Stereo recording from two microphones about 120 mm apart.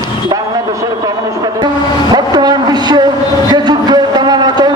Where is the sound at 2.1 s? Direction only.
35° right (ahead or behind).